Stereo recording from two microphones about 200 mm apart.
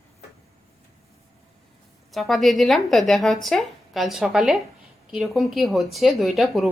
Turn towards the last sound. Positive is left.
turn(degrees=0)  # may be behind; listen again after turning